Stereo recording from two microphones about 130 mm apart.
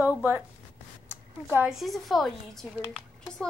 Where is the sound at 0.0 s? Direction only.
15° right (ahead or behind).